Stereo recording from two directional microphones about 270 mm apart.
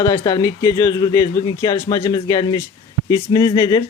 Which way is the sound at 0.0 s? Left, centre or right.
Centre.